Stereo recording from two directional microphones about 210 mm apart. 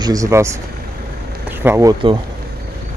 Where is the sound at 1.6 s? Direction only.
10° right (ahead or behind).